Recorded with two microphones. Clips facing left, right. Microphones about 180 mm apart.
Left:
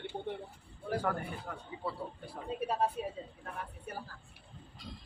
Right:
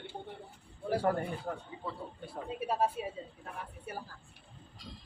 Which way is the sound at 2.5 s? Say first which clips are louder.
Right 1 dB; 5° right (ahead or behind).